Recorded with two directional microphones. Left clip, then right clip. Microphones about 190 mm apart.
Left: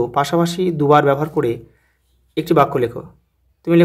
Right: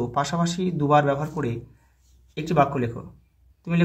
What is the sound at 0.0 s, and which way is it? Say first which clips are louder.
Speech: left 8 dB; 50° left (ahead or behind).